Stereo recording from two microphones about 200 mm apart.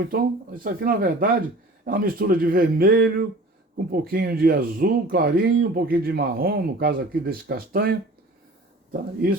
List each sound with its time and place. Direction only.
0.1 s speech: 45° right (ahead or behind)